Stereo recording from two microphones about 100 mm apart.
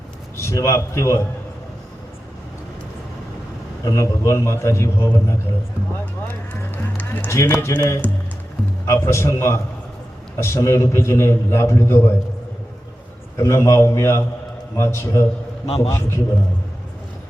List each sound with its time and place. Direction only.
0.3 s a man's voice: 30° left (ahead or behind)
3.8 s a man's voice: 30° left (ahead or behind)
13.3 s a man's voice: 25° left (ahead or behind)
15.6 s a man's voice: 90° left
15.9 s a man's voice: 25° left (ahead or behind)